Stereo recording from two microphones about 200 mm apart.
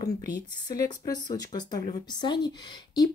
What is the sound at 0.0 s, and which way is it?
Speech, 20° left (ahead or behind).